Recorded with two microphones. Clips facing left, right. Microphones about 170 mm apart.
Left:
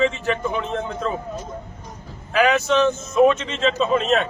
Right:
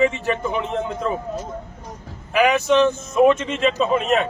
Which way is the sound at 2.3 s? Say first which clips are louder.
Right 1 dB; 15° right (ahead or behind).